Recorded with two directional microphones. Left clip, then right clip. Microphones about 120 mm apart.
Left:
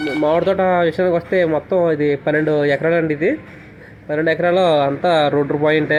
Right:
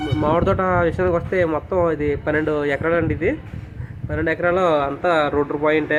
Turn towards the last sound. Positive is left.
turn(degrees=40)  # may be behind; listen again after turning